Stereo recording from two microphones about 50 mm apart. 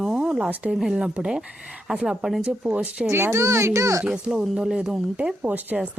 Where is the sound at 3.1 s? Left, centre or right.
Right.